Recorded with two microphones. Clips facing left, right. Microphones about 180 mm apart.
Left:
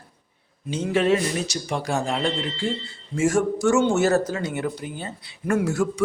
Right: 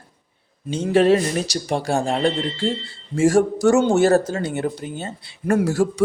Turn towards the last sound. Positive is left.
turn(degrees=-35)  # may be behind; listen again after turning